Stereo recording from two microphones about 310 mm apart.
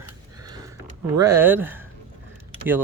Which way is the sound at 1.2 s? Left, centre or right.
Centre.